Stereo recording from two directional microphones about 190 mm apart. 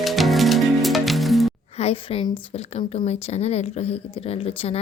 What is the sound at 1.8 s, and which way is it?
A woman's voice, 30° left (ahead or behind).